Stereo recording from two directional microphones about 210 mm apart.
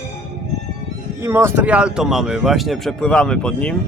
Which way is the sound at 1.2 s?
10° right (ahead or behind).